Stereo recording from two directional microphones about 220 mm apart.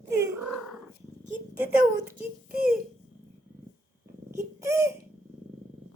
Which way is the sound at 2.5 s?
40° right (ahead or behind).